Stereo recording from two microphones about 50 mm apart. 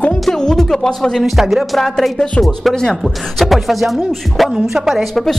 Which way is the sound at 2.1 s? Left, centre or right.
Left.